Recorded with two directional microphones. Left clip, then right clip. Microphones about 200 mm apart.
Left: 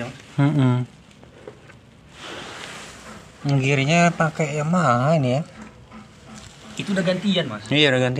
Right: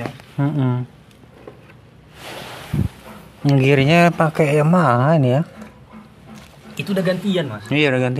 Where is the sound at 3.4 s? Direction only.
50° right (ahead or behind).